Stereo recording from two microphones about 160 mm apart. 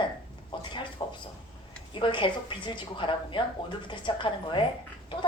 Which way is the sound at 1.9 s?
30° left (ahead or behind).